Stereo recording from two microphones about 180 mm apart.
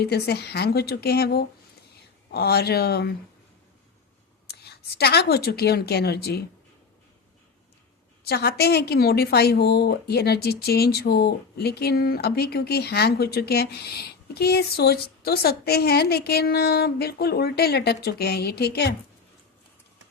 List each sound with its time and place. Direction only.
0.0 s a woman's voice: 60° left (ahead or behind)
4.4 s a woman's voice: 65° left (ahead or behind)
8.2 s a woman's voice: 60° left (ahead or behind)